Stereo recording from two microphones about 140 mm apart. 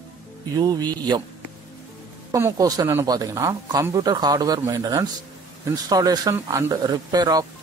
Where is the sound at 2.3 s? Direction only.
20° right (ahead or behind).